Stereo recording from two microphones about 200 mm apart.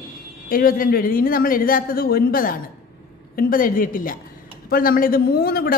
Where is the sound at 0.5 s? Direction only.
45° left (ahead or behind).